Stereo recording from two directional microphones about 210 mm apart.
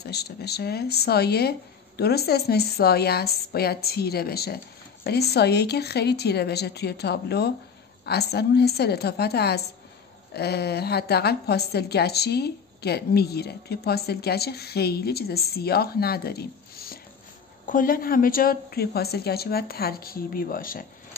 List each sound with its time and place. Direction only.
0.0 s a woman's voice: 50° left (ahead or behind)